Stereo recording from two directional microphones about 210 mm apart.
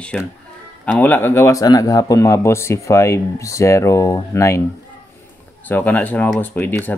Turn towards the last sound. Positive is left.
turn(degrees=10)  # may be behind; listen again after turning